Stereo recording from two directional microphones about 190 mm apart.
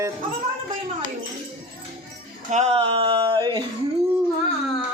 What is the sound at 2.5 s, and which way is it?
Speech, 35° right (ahead or behind).